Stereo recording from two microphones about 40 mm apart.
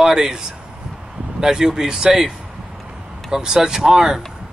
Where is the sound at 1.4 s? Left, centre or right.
Centre.